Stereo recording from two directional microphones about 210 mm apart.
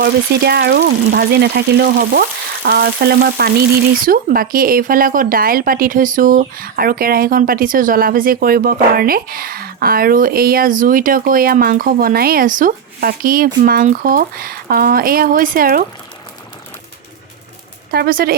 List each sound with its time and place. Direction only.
0.0 s speech: 50° right (ahead or behind)
17.9 s speech: 45° right (ahead or behind)